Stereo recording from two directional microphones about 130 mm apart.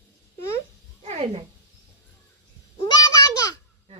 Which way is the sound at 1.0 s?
60° right (ahead or behind).